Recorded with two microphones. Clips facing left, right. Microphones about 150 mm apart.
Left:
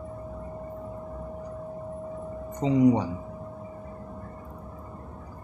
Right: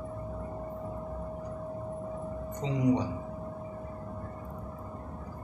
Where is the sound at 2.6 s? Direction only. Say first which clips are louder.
Left 7 dB; 60° left (ahead or behind).